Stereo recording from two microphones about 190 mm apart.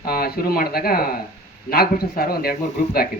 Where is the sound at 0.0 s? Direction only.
50° left (ahead or behind).